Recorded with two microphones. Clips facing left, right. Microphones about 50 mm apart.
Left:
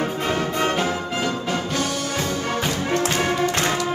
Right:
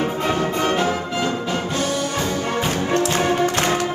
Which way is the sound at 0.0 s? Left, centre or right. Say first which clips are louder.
Right 2 dB; right.